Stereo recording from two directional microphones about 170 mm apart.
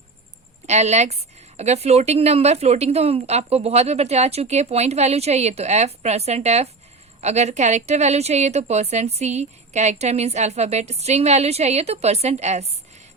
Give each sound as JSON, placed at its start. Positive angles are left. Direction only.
{"t": 0.7, "sound": "a woman's voice", "side_deg": -40}